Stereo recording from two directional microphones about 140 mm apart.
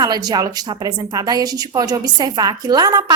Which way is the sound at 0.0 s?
30° right (ahead or behind).